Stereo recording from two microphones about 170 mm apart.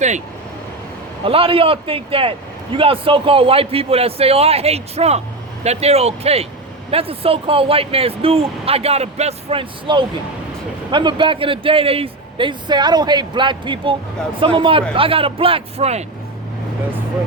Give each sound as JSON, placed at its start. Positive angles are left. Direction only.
{"t": 1.2, "sound": "speech", "side_deg": -30}